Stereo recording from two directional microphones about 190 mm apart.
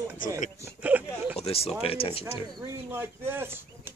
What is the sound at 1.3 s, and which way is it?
Speech, 30° left (ahead or behind).